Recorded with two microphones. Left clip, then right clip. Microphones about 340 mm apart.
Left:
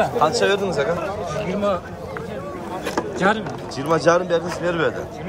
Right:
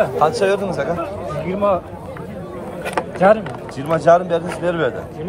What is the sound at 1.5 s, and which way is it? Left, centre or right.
Speech, centre.